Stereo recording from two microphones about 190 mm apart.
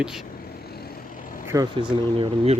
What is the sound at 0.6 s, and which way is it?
Vehicle, 55° left (ahead or behind).